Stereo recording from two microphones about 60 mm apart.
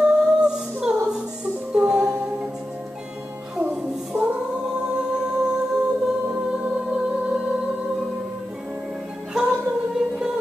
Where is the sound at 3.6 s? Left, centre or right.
Centre.